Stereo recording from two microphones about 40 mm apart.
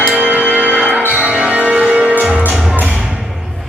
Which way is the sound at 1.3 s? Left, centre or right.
Right.